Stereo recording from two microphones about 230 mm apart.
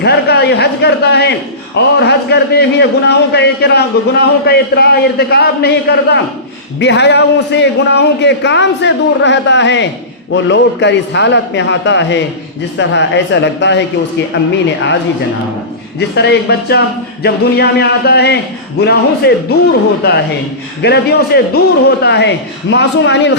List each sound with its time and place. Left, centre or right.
0.0 s a man's voice: left
16.0 s a man's voice: left
20.8 s a man's voice: left